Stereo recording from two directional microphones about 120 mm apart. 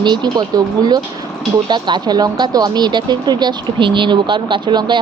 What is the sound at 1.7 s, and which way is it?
Speech, 35° right (ahead or behind).